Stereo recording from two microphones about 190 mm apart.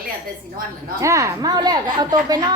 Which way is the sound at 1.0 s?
15° right (ahead or behind).